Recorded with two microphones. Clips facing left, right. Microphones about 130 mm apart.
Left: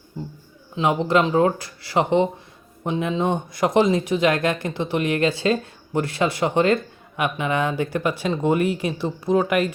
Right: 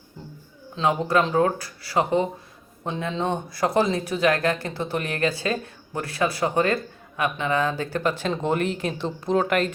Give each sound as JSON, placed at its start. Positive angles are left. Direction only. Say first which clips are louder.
{"t": 0.8, "sound": "speech", "louder": "left 2 dB", "side_deg": 20}